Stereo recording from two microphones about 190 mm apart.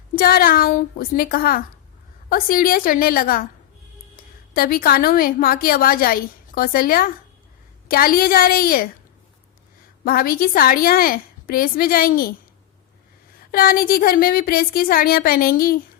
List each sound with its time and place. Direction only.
0.2 s a woman's voice: 50° left (ahead or behind)
4.5 s a woman's voice: 50° left (ahead or behind)
10.0 s a woman's voice: 50° left (ahead or behind)
13.5 s a woman's voice: 50° left (ahead or behind)